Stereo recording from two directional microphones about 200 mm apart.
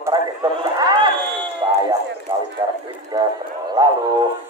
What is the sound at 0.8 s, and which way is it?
Speech, 20° right (ahead or behind).